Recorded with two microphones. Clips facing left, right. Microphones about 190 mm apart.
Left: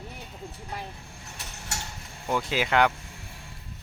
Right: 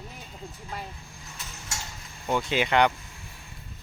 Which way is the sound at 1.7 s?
65° left (ahead or behind).